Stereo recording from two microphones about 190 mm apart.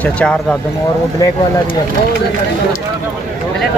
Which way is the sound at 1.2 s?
15° left (ahead or behind).